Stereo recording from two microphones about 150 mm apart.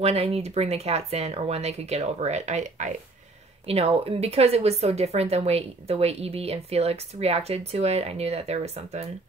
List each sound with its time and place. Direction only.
0.0 s speech: 40° right (ahead or behind)
3.6 s speech: 40° right (ahead or behind)